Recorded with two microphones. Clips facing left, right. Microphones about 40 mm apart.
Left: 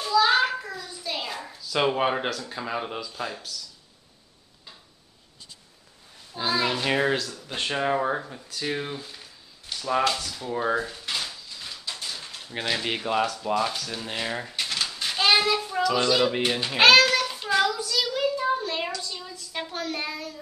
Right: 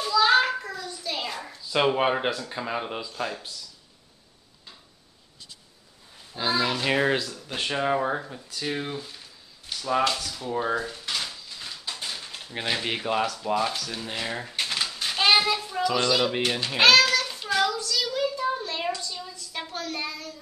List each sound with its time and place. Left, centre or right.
0.2 s a sound: centre
0.6 s a sound: centre
1.8 s speech: centre
6.6 s speech: centre
10.4 s a sound: centre
12.6 s speech: centre
14.5 s typewriter: right
15.0 s child singing: centre
15.5 s a child's voice: centre
16.4 s child singing: centre
18.9 s a woman's voice: centre